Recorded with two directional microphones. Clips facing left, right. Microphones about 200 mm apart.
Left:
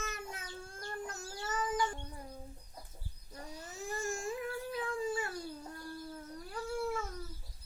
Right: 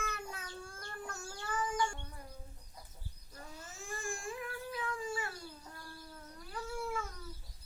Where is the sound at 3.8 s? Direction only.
40° left (ahead or behind).